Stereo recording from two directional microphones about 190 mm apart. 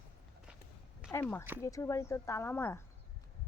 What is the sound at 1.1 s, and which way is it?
Speech, 10° left (ahead or behind).